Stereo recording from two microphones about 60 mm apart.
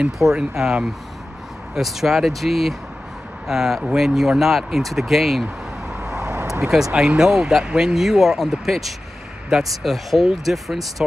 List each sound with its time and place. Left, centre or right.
0.2 s speech: centre
5.9 s vehicle: centre
6.7 s speech: centre